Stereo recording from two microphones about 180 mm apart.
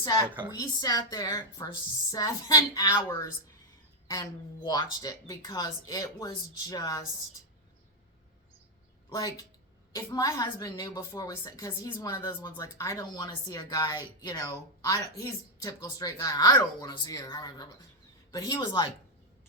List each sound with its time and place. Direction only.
0.5 s a woman's voice: 20° left (ahead or behind)
9.0 s a woman's voice: 20° left (ahead or behind)